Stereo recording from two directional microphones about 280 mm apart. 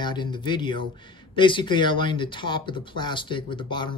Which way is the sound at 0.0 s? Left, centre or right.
Centre.